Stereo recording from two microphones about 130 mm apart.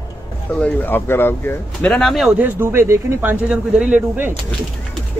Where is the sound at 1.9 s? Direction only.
Centre (ahead or behind).